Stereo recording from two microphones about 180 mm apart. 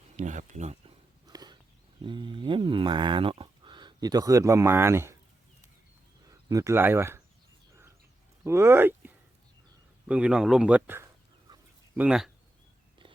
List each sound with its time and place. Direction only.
0.2 s speech: 40° right (ahead or behind)
1.3 s a sound: 20° right (ahead or behind)
2.0 s speech: 25° right (ahead or behind)
6.2 s speech: 20° right (ahead or behind)
8.4 s speech: 15° right (ahead or behind)